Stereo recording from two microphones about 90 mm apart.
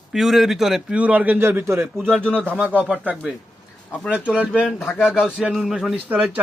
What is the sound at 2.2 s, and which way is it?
Speech, 10° left (ahead or behind).